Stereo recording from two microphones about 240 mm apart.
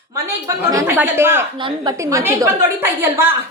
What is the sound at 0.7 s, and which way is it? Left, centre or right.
A woman's voice, centre.